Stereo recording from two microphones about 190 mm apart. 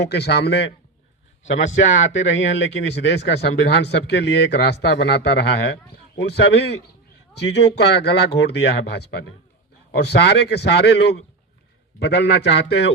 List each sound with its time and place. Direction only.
0.0 s speech: 60° left (ahead or behind)
1.5 s speech: 80° left; by 12.7 s 65° left (ahead or behind)